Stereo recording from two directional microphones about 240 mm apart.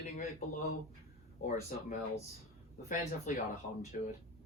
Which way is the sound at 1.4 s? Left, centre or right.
Left.